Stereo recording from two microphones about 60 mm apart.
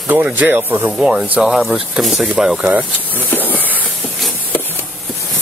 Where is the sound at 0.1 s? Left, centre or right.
Right.